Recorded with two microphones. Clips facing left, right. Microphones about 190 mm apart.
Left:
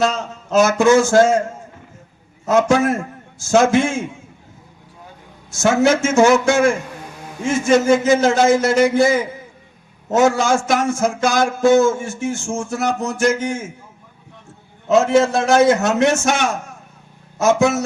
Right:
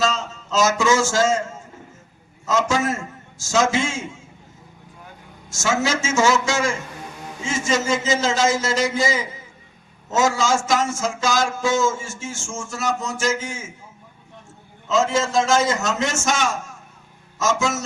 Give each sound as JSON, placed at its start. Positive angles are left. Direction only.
{"t": 0.0, "sound": "speech", "side_deg": 60}
{"t": 5.5, "sound": "speech", "side_deg": 60}
{"t": 14.8, "sound": "speech", "side_deg": 60}